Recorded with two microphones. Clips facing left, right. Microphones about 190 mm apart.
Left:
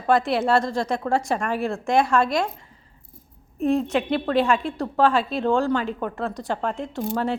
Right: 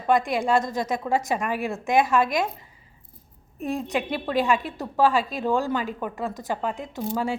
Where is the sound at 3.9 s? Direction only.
5° right (ahead or behind).